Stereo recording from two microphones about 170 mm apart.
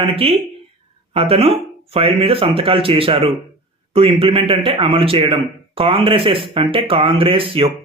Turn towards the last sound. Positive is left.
turn(degrees=-30)  # may be behind; listen again after turning